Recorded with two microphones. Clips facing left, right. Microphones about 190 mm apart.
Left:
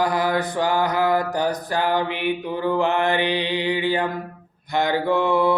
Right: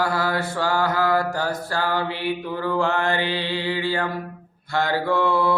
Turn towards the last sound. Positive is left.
turn(degrees=20)  # may be behind; listen again after turning